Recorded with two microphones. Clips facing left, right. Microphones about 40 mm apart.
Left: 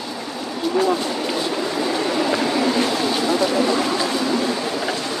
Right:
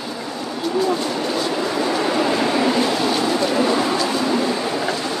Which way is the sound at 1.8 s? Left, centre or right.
Centre.